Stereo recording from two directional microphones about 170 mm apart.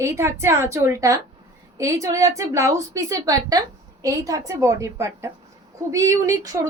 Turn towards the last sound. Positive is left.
turn(degrees=-20)  # may be behind; listen again after turning